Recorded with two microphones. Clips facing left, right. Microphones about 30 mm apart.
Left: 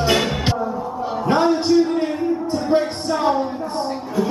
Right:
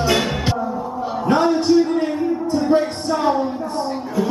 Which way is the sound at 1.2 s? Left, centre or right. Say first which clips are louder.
Right 1 dB; centre.